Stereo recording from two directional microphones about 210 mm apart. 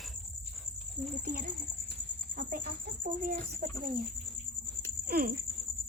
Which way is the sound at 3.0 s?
45° right (ahead or behind).